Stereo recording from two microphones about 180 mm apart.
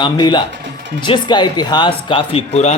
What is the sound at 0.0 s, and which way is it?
Speech, 25° left (ahead or behind).